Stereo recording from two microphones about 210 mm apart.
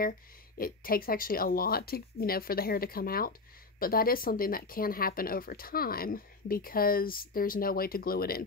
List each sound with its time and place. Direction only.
0.6 s speech: 45° left (ahead or behind)